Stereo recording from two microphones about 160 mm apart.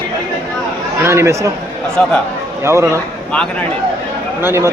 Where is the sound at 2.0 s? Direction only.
10° left (ahead or behind).